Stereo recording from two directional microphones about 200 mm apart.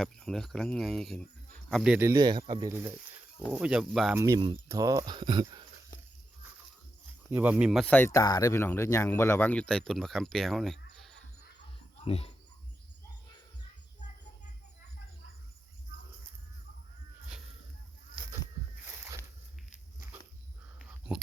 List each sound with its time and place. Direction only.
0.0 s speech: centre (ahead or behind)
2.0 s speech: 20° right (ahead or behind)
3.5 s speech: 5° right (ahead or behind)
4.2 s speech: 20° right (ahead or behind)
7.3 s speech: 10° right (ahead or behind)
10.9 s a sound: centre (ahead or behind)
12.0 s speech: 30° left (ahead or behind)